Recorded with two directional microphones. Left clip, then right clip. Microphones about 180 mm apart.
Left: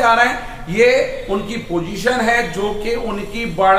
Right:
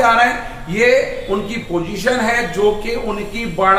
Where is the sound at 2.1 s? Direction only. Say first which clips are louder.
Even; 20° left (ahead or behind).